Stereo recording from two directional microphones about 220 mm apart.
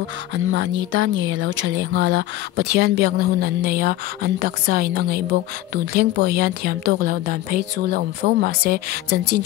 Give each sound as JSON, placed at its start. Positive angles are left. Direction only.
{"t": 0.3, "sound": "speech", "side_deg": -55}